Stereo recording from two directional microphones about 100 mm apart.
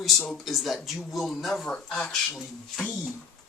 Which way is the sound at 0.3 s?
Centre (ahead or behind).